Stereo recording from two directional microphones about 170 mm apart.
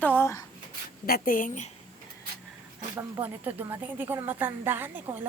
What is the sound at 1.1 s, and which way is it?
Speech, 55° left (ahead or behind).